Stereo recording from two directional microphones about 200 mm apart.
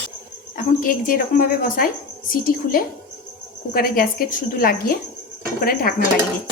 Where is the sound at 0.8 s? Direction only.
45° left (ahead or behind).